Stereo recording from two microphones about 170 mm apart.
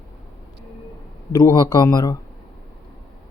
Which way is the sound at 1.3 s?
25° left (ahead or behind).